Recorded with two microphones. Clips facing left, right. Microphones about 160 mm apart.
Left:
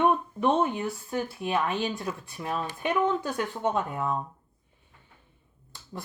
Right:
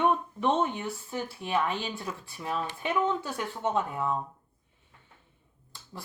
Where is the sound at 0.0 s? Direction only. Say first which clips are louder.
Left 2 dB; 10° left (ahead or behind).